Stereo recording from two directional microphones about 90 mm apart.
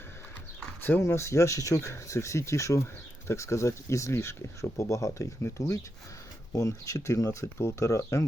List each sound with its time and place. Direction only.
0.8 s speech: 25° left (ahead or behind)